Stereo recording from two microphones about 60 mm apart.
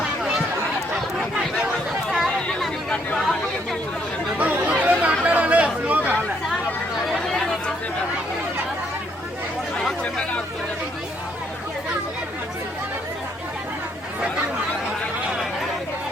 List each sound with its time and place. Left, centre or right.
2.0 s chatter: centre
2.5 s a sound: centre
3.2 s chatter: centre
4.4 s chatter: right
7.1 s chatter: centre
10.0 s chatter: centre